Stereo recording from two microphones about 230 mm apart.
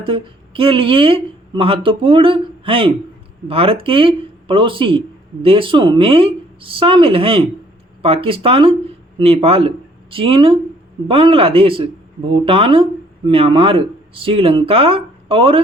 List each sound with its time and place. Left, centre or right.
0.0 s speech: right